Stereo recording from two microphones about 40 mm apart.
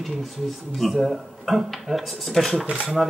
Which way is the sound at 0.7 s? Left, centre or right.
Centre.